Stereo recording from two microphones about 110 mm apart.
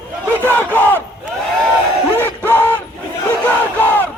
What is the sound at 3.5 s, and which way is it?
Battle cry, 15° left (ahead or behind).